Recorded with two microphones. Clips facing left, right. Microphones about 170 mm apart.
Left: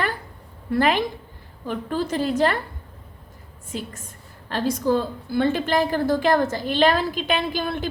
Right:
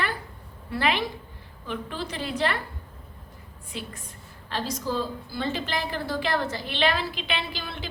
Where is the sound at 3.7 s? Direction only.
45° left (ahead or behind).